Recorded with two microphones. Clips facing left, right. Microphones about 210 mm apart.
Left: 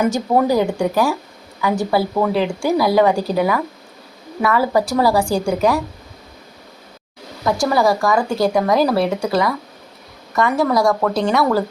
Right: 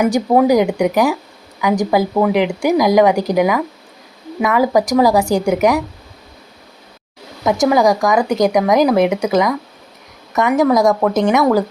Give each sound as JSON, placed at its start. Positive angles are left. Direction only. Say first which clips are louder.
{"t": 0.0, "sound": "speech", "louder": "right 3 dB", "side_deg": -15}
{"t": 7.4, "sound": "a woman's voice", "louder": "right 3 dB", "side_deg": -20}